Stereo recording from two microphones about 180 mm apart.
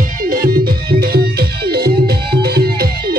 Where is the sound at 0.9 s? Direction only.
60° right (ahead or behind).